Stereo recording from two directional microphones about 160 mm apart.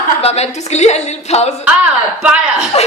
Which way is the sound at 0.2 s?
40° left (ahead or behind).